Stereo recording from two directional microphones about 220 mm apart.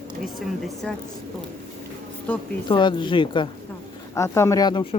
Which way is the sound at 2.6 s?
20° left (ahead or behind).